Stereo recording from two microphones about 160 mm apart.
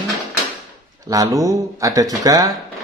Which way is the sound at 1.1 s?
20° right (ahead or behind).